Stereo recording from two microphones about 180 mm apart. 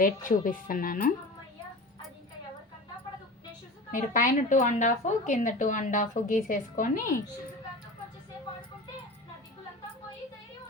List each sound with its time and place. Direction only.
0.0 s speech: 45° left (ahead or behind)
3.9 s speech: 45° left (ahead or behind)